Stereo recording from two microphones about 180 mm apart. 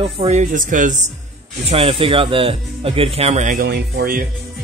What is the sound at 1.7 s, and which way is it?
Speech, 30° right (ahead or behind).